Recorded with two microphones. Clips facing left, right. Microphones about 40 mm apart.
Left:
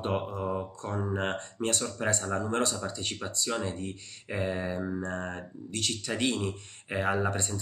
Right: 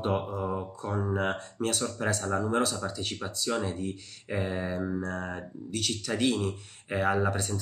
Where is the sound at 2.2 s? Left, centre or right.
Centre.